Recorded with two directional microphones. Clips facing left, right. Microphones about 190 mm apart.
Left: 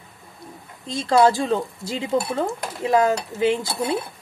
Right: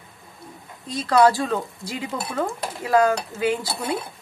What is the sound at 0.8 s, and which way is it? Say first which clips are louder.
Speech: even; 25° left (ahead or behind).